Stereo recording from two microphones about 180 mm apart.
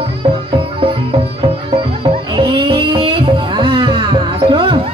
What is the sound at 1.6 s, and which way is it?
Music, 30° right (ahead or behind).